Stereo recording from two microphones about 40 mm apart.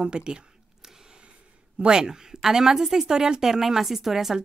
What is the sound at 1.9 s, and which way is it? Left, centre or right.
Speech, centre.